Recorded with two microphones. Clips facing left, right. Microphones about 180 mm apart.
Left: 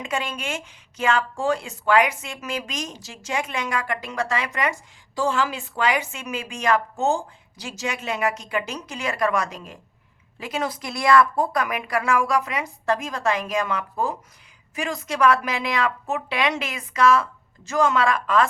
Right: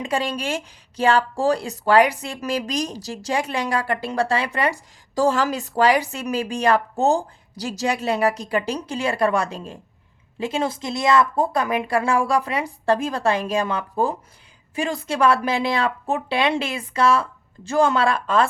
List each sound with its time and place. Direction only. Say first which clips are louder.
0.0 s speech: right 4 dB; 35° right (ahead or behind)